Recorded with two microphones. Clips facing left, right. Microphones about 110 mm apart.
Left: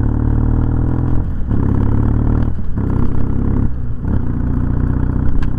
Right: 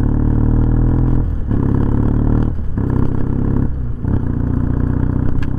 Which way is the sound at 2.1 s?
10° right (ahead or behind).